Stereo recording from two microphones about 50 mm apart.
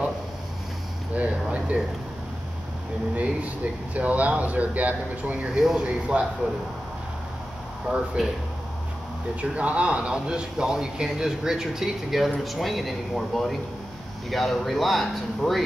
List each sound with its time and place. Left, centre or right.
1.1 s a sound: right
3.2 s speech: right
5.5 s speech: centre
5.8 s speech: right
7.9 s speech: right
9.4 s speech: right; by 15.6 s centre